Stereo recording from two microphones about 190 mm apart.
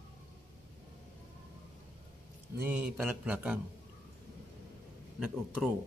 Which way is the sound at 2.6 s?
5° right (ahead or behind).